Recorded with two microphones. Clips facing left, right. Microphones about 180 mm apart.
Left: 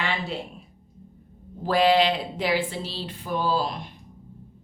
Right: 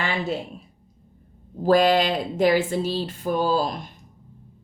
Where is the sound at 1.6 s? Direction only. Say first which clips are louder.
Right 2 dB; 45° right (ahead or behind).